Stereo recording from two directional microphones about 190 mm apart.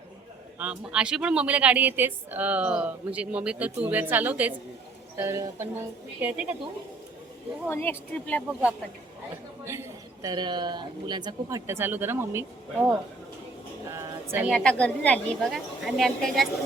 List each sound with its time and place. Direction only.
0.6 s a woman's voice: 5° right (ahead or behind)
7.7 s speech: 10° left (ahead or behind)
10.2 s a woman's voice: 25° right (ahead or behind)
13.9 s a sound: 10° right (ahead or behind)
14.5 s a woman's voice: 5° left (ahead or behind)